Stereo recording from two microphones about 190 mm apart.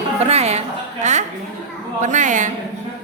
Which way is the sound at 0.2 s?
35° right (ahead or behind).